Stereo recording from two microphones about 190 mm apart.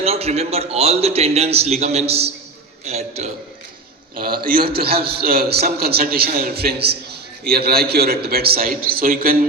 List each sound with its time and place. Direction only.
0.0 s a man's voice: 30° right (ahead or behind)
4.4 s a man's voice: 50° right (ahead or behind)